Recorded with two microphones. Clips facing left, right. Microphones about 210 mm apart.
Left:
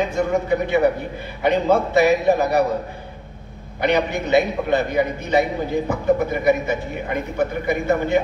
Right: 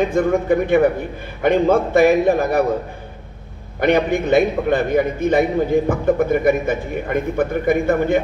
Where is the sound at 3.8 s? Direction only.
50° right (ahead or behind).